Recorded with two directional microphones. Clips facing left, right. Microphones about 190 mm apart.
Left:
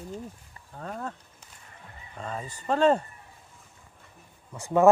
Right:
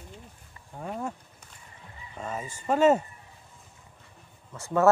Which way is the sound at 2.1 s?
5° right (ahead or behind).